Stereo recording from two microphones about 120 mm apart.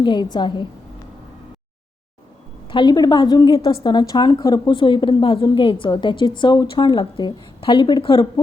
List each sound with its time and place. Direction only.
0.0 s a woman's voice: 40° left (ahead or behind)
2.6 s a woman's voice: 40° left (ahead or behind)